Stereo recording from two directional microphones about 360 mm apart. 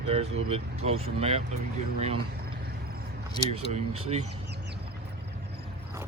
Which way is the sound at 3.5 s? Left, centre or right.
Centre.